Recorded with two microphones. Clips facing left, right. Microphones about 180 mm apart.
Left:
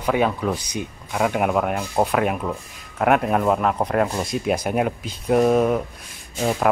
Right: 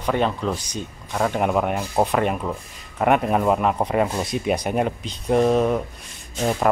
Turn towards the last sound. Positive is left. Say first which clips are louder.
# even
turn(degrees=0)  # may be behind; listen again after turning